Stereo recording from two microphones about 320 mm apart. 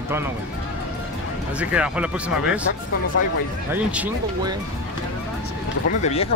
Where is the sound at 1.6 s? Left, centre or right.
Centre.